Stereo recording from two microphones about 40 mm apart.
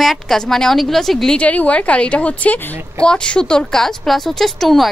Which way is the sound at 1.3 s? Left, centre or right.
Left.